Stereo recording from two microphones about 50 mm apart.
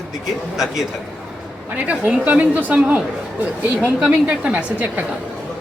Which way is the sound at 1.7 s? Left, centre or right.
Right.